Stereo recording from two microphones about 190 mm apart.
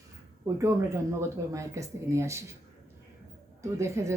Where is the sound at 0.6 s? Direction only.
15° right (ahead or behind).